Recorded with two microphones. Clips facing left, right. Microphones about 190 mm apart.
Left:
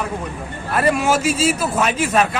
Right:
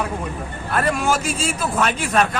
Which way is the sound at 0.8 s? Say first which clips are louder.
Left 3 dB; 5° left (ahead or behind).